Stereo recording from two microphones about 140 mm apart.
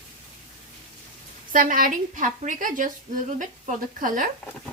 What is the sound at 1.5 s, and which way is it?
Speech, 80° right.